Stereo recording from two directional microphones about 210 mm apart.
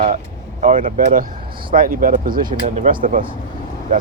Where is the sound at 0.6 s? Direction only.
40° right (ahead or behind).